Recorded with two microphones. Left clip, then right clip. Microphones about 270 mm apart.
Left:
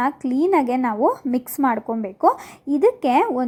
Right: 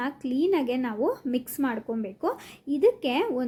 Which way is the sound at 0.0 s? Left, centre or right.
Centre.